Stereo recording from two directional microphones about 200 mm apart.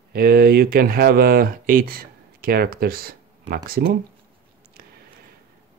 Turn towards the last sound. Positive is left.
turn(degrees=-50)  # may be behind; listen again after turning